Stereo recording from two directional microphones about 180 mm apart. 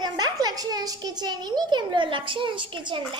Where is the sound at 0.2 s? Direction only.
20° right (ahead or behind).